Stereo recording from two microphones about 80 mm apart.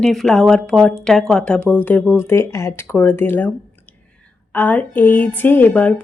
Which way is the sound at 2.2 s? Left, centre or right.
Left.